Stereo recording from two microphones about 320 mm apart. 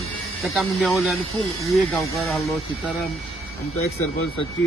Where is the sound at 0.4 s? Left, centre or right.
Centre.